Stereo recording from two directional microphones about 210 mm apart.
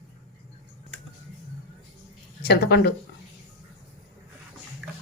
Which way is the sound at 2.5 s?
50° left (ahead or behind).